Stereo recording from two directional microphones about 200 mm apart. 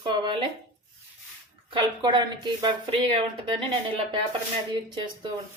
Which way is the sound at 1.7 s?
20° right (ahead or behind).